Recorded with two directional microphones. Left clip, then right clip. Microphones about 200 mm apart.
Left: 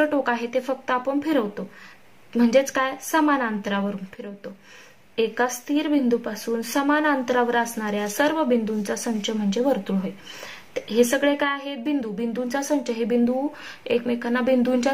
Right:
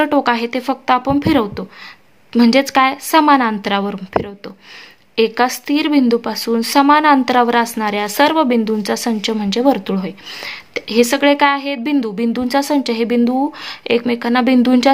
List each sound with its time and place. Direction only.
0.0 s speech: 45° right (ahead or behind)